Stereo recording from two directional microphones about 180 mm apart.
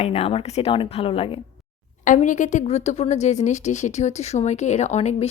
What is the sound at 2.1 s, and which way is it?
Speech, 45° left (ahead or behind).